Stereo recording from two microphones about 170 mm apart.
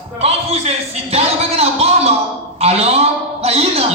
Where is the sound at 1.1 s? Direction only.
35° right (ahead or behind).